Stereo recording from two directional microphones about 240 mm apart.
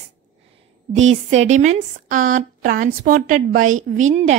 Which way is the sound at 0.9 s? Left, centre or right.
Right.